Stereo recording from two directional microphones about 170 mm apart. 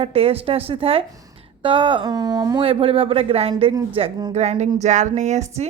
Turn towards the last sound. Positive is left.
turn(degrees=-40)  # may be behind; listen again after turning